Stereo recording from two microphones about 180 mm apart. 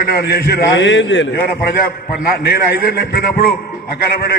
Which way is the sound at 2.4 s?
60° left (ahead or behind).